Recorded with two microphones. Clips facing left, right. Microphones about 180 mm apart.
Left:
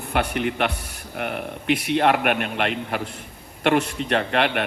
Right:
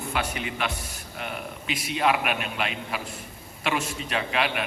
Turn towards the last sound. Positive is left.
turn(degrees=60)  # may be behind; listen again after turning